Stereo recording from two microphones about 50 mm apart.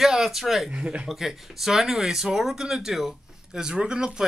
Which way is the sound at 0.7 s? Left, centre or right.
Right.